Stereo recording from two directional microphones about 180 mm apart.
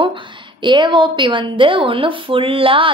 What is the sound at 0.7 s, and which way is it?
A woman's voice, 25° right (ahead or behind).